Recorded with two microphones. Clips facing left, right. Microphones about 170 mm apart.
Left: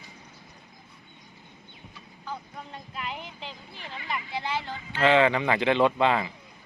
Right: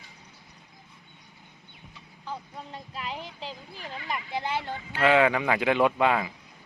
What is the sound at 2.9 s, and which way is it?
Speech, 35° right (ahead or behind).